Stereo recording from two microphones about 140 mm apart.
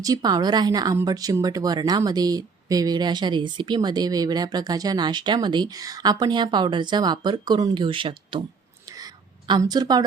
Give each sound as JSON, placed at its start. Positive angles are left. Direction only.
{"t": 0.0, "sound": "speech", "side_deg": -25}
{"t": 9.5, "sound": "speech", "side_deg": -30}